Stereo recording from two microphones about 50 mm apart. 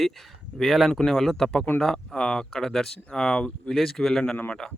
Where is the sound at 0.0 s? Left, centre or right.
Centre.